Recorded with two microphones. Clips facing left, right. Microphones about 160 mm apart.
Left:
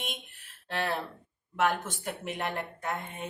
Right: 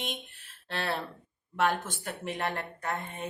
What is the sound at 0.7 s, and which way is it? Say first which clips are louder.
A woman's voice: left 1 dB; 15° left (ahead or behind).